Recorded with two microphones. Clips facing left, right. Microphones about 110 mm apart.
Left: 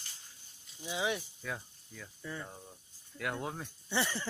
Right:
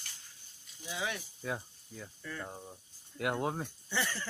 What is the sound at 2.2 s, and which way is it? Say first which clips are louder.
Speech: left 1 dB; 20° left (ahead or behind).